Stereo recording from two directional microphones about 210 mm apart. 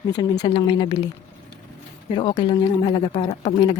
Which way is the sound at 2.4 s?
25° left (ahead or behind).